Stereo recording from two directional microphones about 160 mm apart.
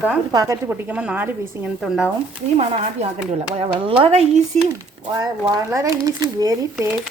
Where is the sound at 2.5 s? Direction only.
40° right (ahead or behind).